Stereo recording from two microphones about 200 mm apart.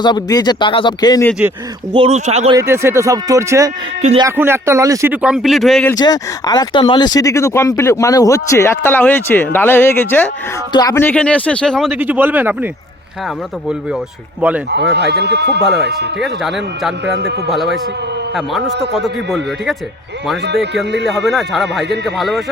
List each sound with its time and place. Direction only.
0.0 s speech: 20° left (ahead or behind)
1.3 s speech: 5° right (ahead or behind)
1.9 s speech: 30° right (ahead or behind)
2.6 s speech: 15° right (ahead or behind)
5.8 s speech: 20° left (ahead or behind)
11.9 s speech: 10° right (ahead or behind)
14.7 s speech: 55° right (ahead or behind)
16.2 s speech: centre (ahead or behind)
17.1 s speech: 55° right (ahead or behind)
17.5 s speech: centre (ahead or behind)
19.0 s speech: centre (ahead or behind)
20.4 s speech: 60° right (ahead or behind)
21.1 s speech: centre (ahead or behind)